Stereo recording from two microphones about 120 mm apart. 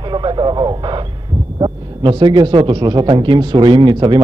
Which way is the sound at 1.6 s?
40° right (ahead or behind).